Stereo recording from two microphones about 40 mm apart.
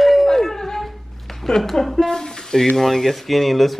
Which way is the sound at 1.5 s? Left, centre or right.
Centre.